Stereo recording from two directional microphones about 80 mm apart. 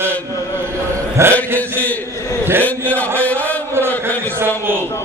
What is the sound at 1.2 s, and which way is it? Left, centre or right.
Chant, right.